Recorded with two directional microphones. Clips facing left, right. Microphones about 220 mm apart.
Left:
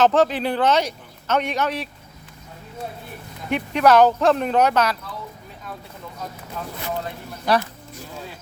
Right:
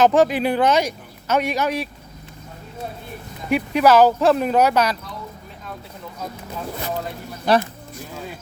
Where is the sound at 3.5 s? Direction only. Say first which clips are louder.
Right 1 dB; 5° right (ahead or behind).